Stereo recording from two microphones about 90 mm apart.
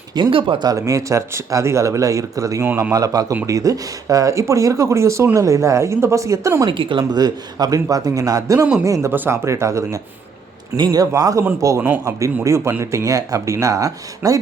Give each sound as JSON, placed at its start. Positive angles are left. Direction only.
{"t": 0.1, "sound": "speech", "side_deg": -65}
{"t": 0.7, "sound": "a man's voice", "side_deg": -35}
{"t": 6.7, "sound": "speech", "side_deg": -70}
{"t": 7.1, "sound": "speech", "side_deg": -50}
{"t": 10.8, "sound": "a man's voice", "side_deg": -45}